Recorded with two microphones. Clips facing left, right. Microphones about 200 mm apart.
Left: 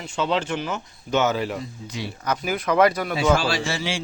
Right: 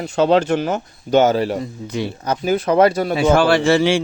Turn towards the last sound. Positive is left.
turn(degrees=-60)  # may be behind; listen again after turning